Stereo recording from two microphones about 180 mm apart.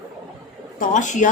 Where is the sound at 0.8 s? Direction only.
45° left (ahead or behind).